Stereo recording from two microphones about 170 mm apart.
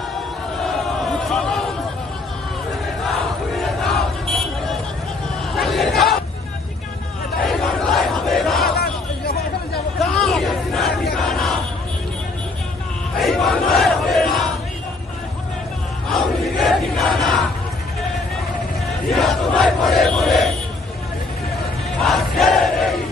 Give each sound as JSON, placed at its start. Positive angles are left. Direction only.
{"t": 0.6, "sound": "a sound", "side_deg": 0}
{"t": 3.5, "sound": "battle cry", "side_deg": 0}
{"t": 5.5, "sound": "crowd", "side_deg": 0}
{"t": 7.4, "sound": "battle cry", "side_deg": 5}
{"t": 8.7, "sound": "a sound", "side_deg": 65}
{"t": 9.9, "sound": "crowd", "side_deg": 5}
{"t": 11.1, "sound": "battle cry", "side_deg": 0}
{"t": 13.2, "sound": "battle cry", "side_deg": 0}
{"t": 16.1, "sound": "crowd", "side_deg": 0}
{"t": 19.1, "sound": "crowd", "side_deg": 5}
{"t": 22.0, "sound": "crowd", "side_deg": 0}